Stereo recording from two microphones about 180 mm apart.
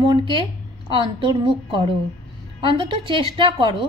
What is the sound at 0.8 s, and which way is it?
A woman's voice, 25° right (ahead or behind).